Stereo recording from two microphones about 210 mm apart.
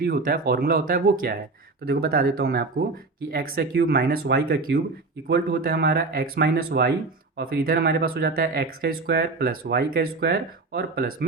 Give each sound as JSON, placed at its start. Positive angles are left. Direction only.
{"t": 0.0, "sound": "speech", "side_deg": -45}